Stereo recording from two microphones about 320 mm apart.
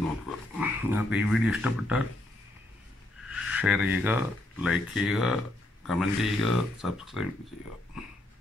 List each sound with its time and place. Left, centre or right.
0.6 s speech: centre
3.3 s speech: centre